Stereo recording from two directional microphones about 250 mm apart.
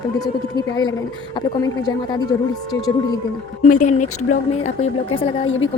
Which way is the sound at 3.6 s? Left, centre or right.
Left.